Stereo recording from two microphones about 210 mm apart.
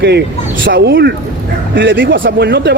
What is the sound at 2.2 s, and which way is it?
Speech, 50° right (ahead or behind).